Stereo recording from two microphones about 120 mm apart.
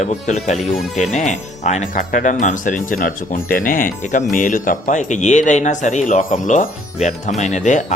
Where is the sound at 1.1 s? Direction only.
85° left.